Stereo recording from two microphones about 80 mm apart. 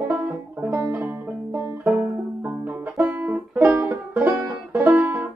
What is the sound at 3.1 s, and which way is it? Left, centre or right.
Music, right.